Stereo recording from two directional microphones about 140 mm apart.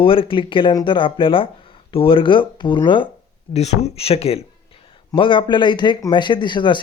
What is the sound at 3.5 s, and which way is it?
Speech, 50° left (ahead or behind).